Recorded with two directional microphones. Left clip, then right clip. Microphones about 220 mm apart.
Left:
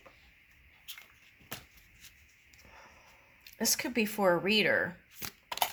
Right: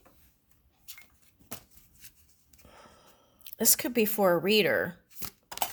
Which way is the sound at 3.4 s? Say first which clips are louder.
Right 3 dB; 45° right (ahead or behind).